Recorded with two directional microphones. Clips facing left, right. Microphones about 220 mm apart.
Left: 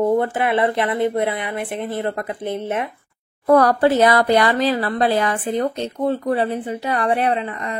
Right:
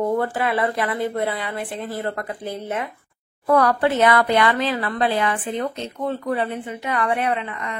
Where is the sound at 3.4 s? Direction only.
40° left (ahead or behind).